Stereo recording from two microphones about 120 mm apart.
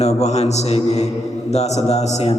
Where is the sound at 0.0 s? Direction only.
65° left (ahead or behind).